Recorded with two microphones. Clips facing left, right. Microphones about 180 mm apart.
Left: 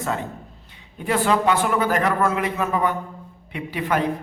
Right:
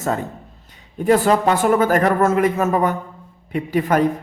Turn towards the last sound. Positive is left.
turn(degrees=-45)  # may be behind; listen again after turning